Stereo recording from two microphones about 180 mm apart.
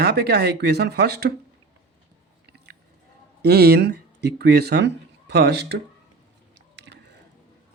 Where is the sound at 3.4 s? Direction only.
65° right (ahead or behind).